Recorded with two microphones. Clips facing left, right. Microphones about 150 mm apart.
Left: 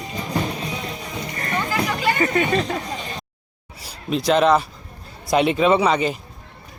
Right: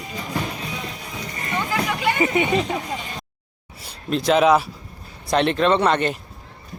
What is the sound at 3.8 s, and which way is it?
A man's voice, centre (ahead or behind).